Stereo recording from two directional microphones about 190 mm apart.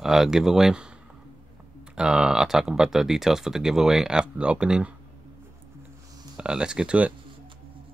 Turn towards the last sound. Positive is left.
turn(degrees=-5)  # may be behind; listen again after turning